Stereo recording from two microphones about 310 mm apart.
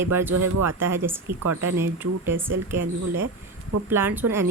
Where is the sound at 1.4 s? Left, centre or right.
Right.